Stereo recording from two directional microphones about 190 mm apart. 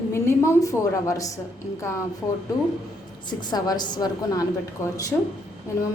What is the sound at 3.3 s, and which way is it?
A woman's voice, 25° left (ahead or behind).